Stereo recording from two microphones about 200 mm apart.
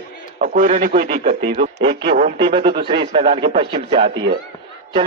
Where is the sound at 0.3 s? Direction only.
40° right (ahead or behind).